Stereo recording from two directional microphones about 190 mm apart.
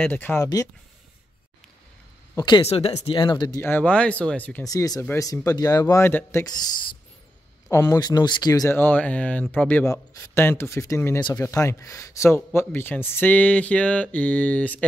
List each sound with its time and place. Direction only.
0.0 s speech: 10° left (ahead or behind)
2.3 s speech: 25° left (ahead or behind); by 4.6 s 10° left (ahead or behind)
4.6 s speech: 20° left (ahead or behind)
7.7 s speech: 15° left (ahead or behind)